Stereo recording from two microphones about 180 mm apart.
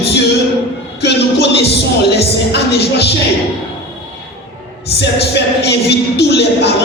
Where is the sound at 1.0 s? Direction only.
70° left (ahead or behind).